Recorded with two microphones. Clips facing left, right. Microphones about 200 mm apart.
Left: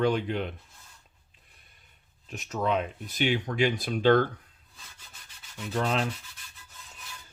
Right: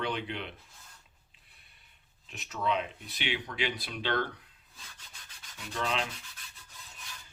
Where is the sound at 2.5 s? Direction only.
45° left (ahead or behind).